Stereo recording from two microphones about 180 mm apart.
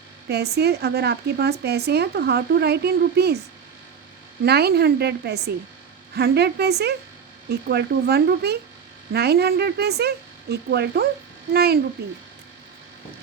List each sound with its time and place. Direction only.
0.3 s speech: 65° right (ahead or behind)
4.4 s speech: 65° right (ahead or behind)